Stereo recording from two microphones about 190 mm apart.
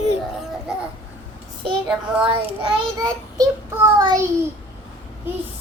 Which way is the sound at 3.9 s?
20° right (ahead or behind).